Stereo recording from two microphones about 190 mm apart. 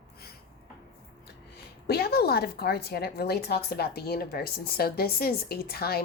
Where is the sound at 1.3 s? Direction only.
55° left (ahead or behind).